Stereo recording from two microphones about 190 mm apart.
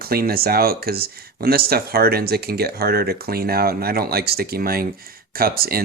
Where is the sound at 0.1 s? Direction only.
55° right (ahead or behind).